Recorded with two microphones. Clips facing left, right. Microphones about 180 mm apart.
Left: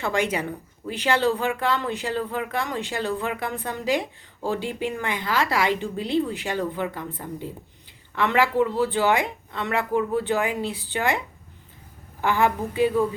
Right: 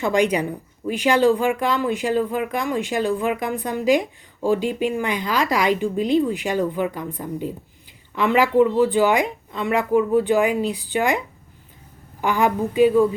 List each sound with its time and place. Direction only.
0.0 s speech: 15° right (ahead or behind)
12.2 s speech: 15° right (ahead or behind)